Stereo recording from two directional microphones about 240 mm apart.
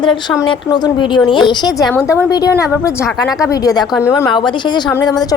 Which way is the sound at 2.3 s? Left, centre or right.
Centre.